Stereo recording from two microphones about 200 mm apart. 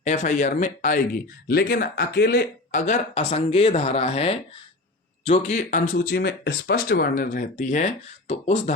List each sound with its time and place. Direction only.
0.0 s speech: 40° left (ahead or behind)